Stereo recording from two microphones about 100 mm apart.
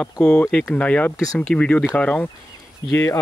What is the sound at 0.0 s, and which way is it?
Speech, 10° left (ahead or behind).